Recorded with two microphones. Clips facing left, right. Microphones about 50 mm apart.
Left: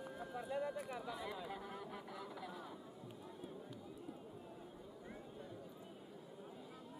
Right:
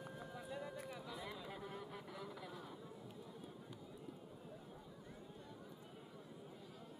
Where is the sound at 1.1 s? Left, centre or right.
Centre.